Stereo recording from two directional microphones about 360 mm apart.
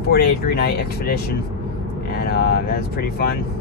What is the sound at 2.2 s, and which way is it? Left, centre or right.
Speech, left.